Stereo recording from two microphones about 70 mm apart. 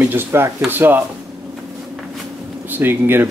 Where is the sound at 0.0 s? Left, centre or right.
Right.